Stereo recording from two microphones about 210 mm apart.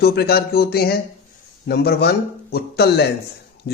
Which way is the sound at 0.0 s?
50° left (ahead or behind).